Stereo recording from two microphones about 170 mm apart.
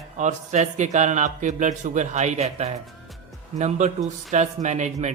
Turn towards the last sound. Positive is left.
turn(degrees=-45)  # may be behind; listen again after turning